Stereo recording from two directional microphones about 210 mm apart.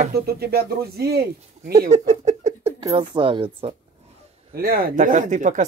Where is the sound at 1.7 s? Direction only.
35° right (ahead or behind).